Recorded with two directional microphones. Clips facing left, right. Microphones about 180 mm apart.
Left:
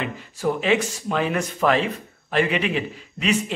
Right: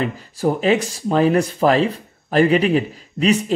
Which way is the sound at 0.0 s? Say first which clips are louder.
Right 5 dB; 35° right (ahead or behind).